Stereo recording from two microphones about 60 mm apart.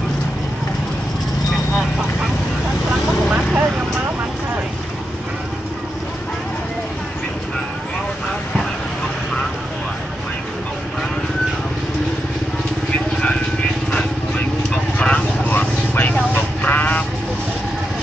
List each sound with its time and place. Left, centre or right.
3.3 s vehicle: centre
15.0 s vehicle: centre
16.6 s a sound: left